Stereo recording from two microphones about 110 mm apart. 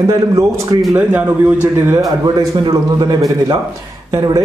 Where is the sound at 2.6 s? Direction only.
40° right (ahead or behind).